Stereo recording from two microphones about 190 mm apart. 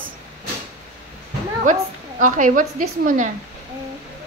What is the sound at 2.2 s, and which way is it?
A woman's voice, 45° right (ahead or behind).